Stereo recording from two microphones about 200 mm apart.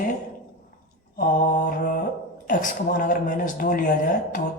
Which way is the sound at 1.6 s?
45° left (ahead or behind).